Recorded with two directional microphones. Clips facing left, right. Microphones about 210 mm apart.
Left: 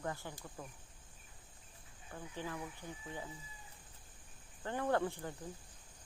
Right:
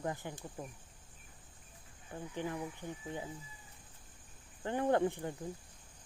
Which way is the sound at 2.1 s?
20° right (ahead or behind).